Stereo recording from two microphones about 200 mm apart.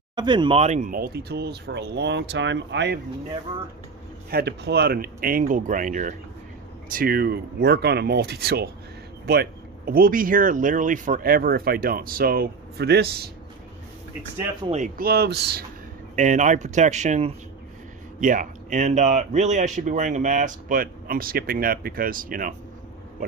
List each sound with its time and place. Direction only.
0.1 s speech: 20° right (ahead or behind); by 3.0 s 60° right (ahead or behind)
4.3 s speech: 55° right (ahead or behind)
14.7 s speech: 40° right (ahead or behind)
16.2 s speech: 40° right (ahead or behind)